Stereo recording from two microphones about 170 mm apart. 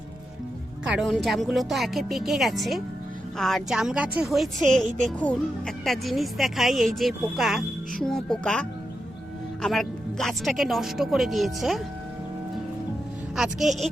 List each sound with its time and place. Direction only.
0.9 s speech: centre (ahead or behind)
13.3 s speech: centre (ahead or behind)